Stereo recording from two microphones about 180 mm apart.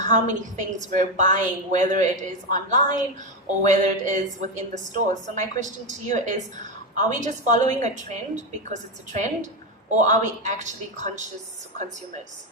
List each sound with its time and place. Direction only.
0.0 s a woman's voice: 45° right (ahead or behind)